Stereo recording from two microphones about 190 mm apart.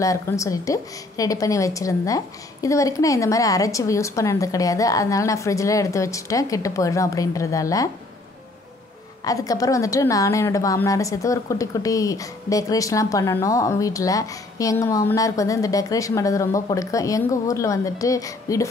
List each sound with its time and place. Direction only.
0.0 s a woman's voice: 15° left (ahead or behind)
9.2 s a woman's voice: 20° left (ahead or behind)